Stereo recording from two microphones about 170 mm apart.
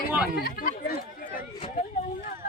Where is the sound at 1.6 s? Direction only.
45° left (ahead or behind).